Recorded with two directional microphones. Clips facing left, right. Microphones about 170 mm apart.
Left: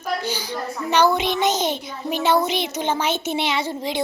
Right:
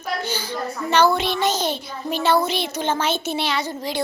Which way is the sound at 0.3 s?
15° left (ahead or behind).